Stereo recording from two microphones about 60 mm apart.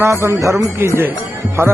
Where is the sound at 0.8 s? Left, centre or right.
Right.